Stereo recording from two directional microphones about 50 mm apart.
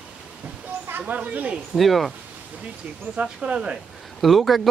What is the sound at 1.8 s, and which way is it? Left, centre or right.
Speech, centre.